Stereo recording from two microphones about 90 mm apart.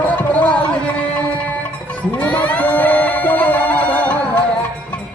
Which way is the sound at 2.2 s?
15° left (ahead or behind).